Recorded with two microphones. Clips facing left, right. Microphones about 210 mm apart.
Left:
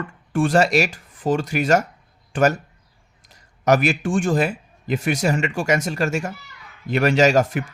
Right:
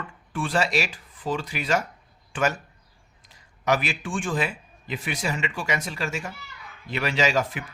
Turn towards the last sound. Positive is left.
turn(degrees=45)  # may be behind; listen again after turning